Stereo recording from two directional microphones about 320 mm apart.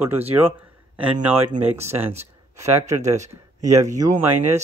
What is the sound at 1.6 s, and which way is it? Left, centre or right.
Speech, centre.